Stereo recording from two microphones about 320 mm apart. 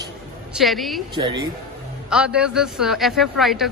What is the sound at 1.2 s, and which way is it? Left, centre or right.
A man's voice, centre.